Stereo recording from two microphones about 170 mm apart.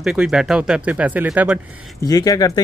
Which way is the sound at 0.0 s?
5° right (ahead or behind).